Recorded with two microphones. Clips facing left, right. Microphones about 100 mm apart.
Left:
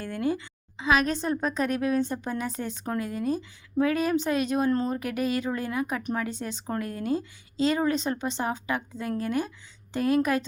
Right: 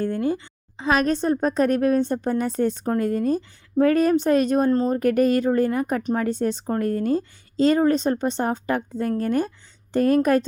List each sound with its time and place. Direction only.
0.2 s a woman's voice: 35° right (ahead or behind)